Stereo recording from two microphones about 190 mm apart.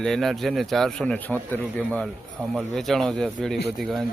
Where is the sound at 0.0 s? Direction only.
Centre (ahead or behind).